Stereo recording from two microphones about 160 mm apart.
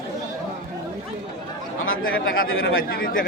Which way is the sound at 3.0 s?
60° left (ahead or behind).